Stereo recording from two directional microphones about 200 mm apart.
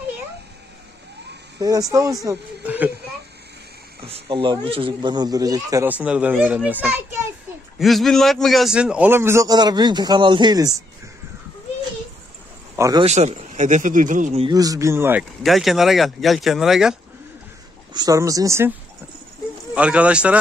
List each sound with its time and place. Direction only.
1.6 s speech: 15° right (ahead or behind)
4.0 s speech: 25° right (ahead or behind)
12.7 s a man's voice: 15° right (ahead or behind)
13.0 s speech: 35° right (ahead or behind)
14.5 s speech: 20° right (ahead or behind)
15.4 s speech: centre (ahead or behind)
17.9 s speech: 15° right (ahead or behind)
19.7 s speech: 5° right (ahead or behind)